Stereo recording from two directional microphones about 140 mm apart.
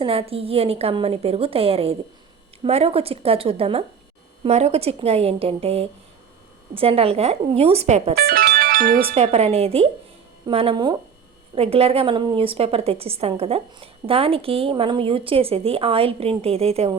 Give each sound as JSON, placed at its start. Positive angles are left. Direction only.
{"t": 0.0, "sound": "a woman's voice", "side_deg": -45}
{"t": 8.1, "sound": "music", "side_deg": -90}
{"t": 9.1, "sound": "a woman's voice", "side_deg": -50}